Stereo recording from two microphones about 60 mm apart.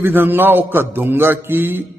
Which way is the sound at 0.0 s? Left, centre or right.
Right.